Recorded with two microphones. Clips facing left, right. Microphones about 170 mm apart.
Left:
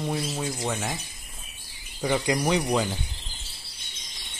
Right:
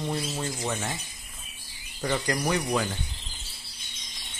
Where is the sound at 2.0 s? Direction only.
15° left (ahead or behind).